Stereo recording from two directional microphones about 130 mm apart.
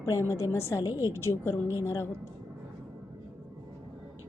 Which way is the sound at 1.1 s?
20° left (ahead or behind).